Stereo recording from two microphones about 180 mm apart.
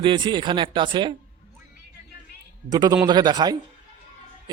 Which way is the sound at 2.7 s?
20° right (ahead or behind).